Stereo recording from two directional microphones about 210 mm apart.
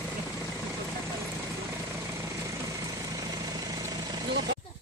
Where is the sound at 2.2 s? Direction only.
15° right (ahead or behind).